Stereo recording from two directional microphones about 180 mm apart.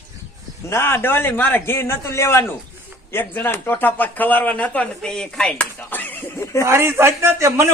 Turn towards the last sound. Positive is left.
turn(degrees=-15)  # may be behind; listen again after turning